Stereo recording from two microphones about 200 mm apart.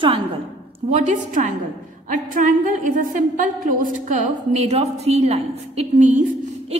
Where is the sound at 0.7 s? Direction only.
35° right (ahead or behind).